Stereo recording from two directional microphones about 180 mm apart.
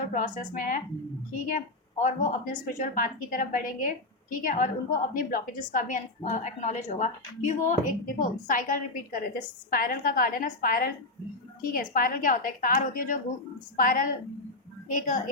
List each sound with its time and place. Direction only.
0.1 s a woman's voice: 45° left (ahead or behind)